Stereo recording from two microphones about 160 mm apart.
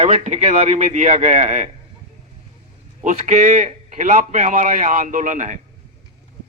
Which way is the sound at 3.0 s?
50° right (ahead or behind).